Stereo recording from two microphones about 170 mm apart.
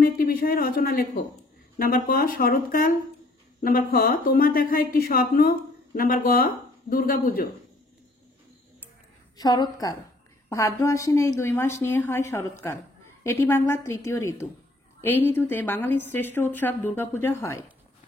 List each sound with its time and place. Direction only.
0.0 s speech: 55° left (ahead or behind)
9.4 s a woman's voice: 25° left (ahead or behind)